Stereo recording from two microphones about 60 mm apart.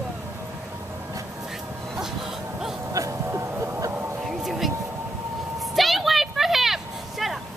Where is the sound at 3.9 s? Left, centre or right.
Right.